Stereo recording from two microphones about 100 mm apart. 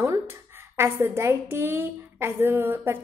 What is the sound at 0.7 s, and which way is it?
A woman's voice, 25° right (ahead or behind).